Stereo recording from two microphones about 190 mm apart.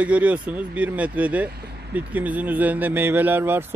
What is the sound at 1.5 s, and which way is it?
Vehicle, 55° right (ahead or behind).